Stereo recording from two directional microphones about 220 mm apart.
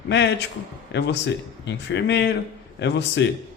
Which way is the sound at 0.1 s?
50° left (ahead or behind).